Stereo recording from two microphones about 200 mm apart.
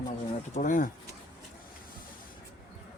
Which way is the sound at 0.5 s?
40° left (ahead or behind).